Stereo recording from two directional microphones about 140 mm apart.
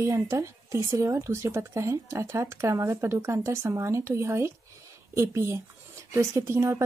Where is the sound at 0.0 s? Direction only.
20° right (ahead or behind).